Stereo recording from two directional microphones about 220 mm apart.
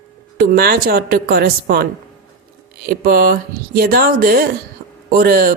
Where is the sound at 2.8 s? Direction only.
40° right (ahead or behind).